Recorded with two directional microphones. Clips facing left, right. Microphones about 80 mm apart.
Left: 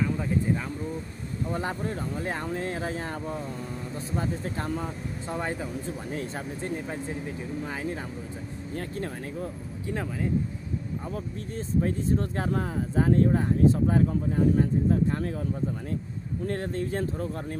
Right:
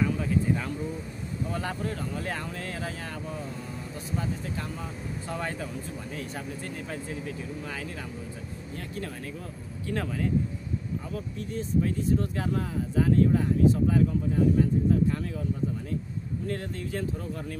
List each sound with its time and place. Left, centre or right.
1.5 s speech: left
5.3 s speech: left
6.6 s speech: left
11.1 s speech: left
16.4 s speech: left